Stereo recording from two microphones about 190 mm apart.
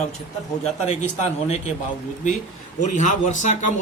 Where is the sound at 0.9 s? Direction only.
35° left (ahead or behind).